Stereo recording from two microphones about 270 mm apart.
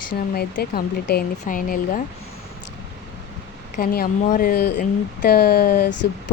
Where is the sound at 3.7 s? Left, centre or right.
Left.